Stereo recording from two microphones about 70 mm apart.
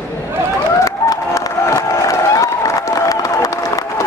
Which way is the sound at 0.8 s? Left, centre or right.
Left.